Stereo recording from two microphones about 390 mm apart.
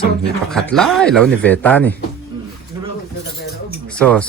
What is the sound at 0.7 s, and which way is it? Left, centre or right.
Speech, centre.